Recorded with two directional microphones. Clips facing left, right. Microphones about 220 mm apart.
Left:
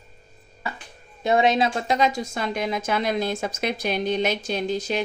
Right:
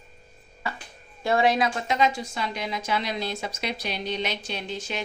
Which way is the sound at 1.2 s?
20° left (ahead or behind).